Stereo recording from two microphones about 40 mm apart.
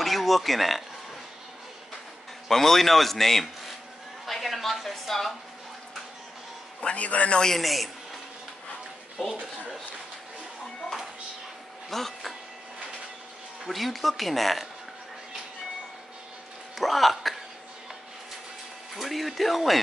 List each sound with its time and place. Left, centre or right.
0.0 s speech: centre
2.5 s a woman's voice: centre
6.8 s a man's voice: left
7.5 s speech: centre
11.9 s speech: centre
13.7 s speech: centre
16.7 s speech: centre
18.9 s speech: centre